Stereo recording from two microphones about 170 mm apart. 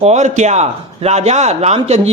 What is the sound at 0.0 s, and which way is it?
A man's voice, 40° right (ahead or behind).